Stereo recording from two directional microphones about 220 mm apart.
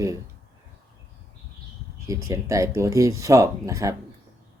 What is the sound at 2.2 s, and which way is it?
Speech, 15° right (ahead or behind).